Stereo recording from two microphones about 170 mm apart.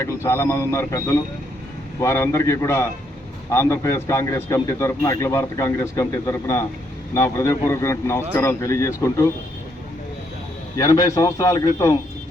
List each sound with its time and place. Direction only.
0.0 s a man's voice: 15° left (ahead or behind)
10.8 s speech: 20° left (ahead or behind)